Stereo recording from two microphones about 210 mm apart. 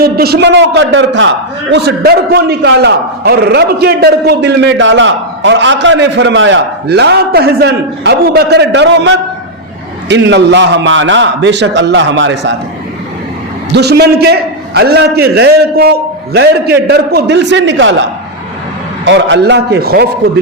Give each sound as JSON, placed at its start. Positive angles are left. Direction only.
{"t": 0.0, "sound": "a man's voice", "side_deg": -50}
{"t": 1.7, "sound": "a man's voice", "side_deg": -50}
{"t": 13.7, "sound": "a man's voice", "side_deg": -50}
{"t": 19.0, "sound": "a man's voice", "side_deg": -60}